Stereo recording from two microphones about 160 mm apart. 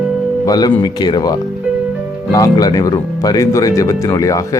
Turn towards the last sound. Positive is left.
turn(degrees=20)  # may be behind; listen again after turning